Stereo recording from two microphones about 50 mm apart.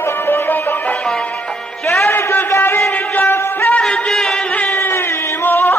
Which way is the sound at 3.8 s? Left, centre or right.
Centre.